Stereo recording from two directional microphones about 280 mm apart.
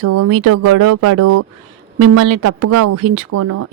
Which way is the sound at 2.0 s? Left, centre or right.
Right.